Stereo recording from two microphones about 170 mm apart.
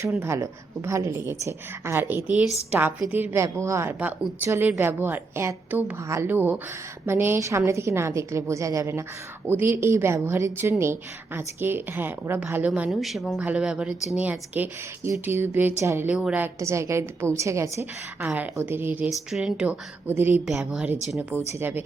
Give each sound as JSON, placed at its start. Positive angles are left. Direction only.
{"t": 0.1, "sound": "a woman's voice", "side_deg": -15}